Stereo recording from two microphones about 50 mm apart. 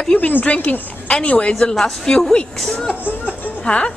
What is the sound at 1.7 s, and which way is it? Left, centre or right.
Speech, centre.